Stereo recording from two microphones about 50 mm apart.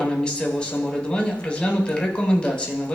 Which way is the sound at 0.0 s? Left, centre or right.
Centre.